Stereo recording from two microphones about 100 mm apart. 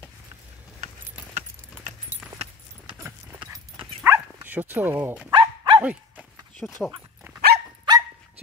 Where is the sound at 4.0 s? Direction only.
20° right (ahead or behind).